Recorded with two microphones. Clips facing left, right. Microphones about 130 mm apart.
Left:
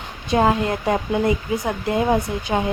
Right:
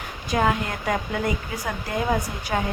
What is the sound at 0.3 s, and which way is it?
Speech, 30° left (ahead or behind).